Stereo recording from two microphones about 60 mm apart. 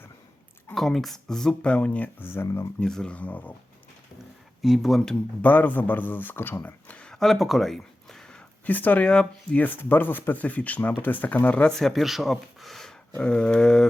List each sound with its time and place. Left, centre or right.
0.7 s speech: centre; by 2.0 s left
2.1 s speech: left
2.8 s speech: centre
3.2 s speech: left
4.6 s speech: centre
5.4 s speech: left
6.7 s speech: left
7.1 s a sound: centre
8.6 s speech: left
9.0 s speech: centre
9.6 s speech: left
11.6 s speech: centre
12.0 s speech: centre
13.2 s speech: centre